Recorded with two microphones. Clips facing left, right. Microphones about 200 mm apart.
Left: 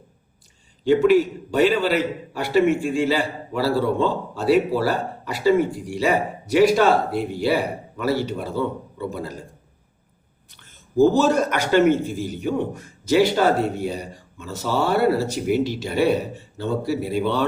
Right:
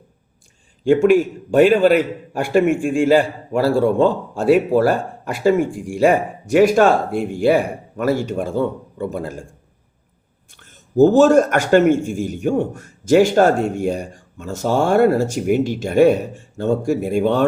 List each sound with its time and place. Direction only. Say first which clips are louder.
0.9 s a man's voice: right 3 dB; 50° right (ahead or behind)
10.5 s a man's voice: right 3 dB; 45° right (ahead or behind)